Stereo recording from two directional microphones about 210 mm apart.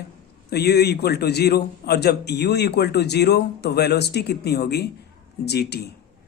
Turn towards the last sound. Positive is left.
turn(degrees=50)  # may be behind; listen again after turning